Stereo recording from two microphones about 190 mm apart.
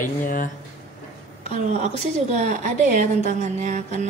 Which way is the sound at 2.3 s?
45° right (ahead or behind).